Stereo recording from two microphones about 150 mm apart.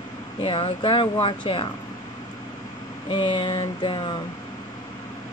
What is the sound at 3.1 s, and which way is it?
Speech, 30° left (ahead or behind).